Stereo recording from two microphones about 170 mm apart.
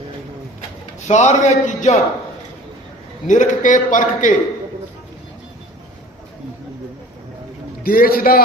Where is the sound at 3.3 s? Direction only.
50° left (ahead or behind).